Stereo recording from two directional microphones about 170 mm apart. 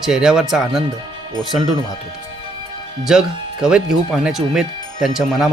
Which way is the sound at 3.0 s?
5° right (ahead or behind).